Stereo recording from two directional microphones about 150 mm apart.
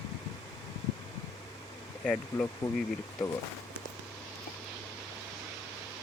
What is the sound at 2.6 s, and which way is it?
Speech, 25° left (ahead or behind).